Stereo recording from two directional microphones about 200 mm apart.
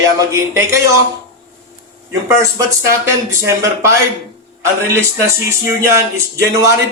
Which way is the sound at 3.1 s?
15° right (ahead or behind).